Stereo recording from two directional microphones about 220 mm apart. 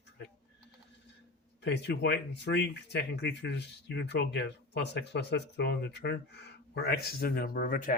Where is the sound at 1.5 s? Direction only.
50° left (ahead or behind).